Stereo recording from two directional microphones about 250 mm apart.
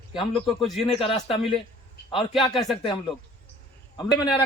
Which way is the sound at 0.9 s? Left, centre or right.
Left.